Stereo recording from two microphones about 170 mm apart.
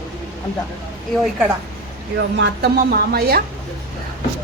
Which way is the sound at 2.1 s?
80° right.